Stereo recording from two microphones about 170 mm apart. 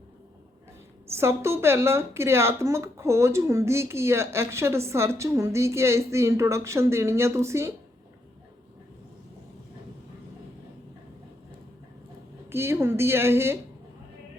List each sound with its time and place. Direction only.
1.0 s a woman's voice: 15° right (ahead or behind)
12.5 s a woman's voice: 15° right (ahead or behind)